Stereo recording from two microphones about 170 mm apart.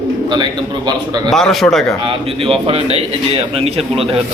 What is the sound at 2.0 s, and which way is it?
Speech, 35° right (ahead or behind).